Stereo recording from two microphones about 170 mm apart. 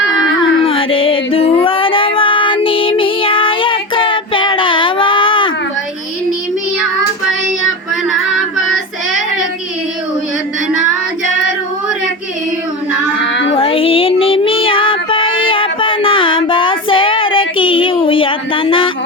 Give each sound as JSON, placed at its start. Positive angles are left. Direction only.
{"t": 0.6, "sound": "female singing", "side_deg": 30}
{"t": 13.2, "sound": "child singing", "side_deg": 90}
{"t": 13.6, "sound": "music", "side_deg": 30}